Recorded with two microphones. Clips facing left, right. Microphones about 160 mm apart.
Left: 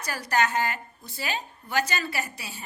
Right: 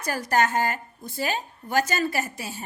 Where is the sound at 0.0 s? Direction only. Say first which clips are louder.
Right 3 dB; 45° right (ahead or behind).